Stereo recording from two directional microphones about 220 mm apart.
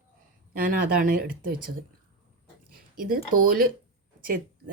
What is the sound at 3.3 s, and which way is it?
Speech, 40° right (ahead or behind).